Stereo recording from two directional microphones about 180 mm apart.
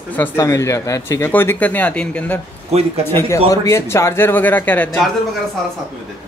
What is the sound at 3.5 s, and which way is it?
Speech, 15° left (ahead or behind).